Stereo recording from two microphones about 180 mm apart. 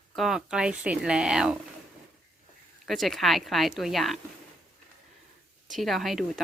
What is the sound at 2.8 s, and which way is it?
Speech, centre (ahead or behind).